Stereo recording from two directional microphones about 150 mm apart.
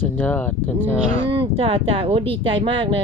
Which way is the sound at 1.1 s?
40° right (ahead or behind).